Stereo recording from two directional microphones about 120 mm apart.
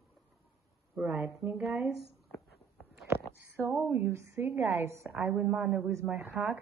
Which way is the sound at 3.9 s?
20° right (ahead or behind).